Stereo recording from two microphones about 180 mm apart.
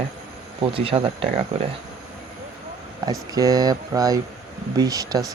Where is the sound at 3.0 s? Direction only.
20° right (ahead or behind).